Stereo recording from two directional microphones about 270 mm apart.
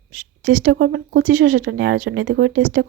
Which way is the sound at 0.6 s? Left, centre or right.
Right.